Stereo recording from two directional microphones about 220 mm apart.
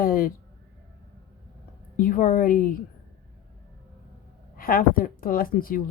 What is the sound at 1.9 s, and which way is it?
Speech, 40° left (ahead or behind).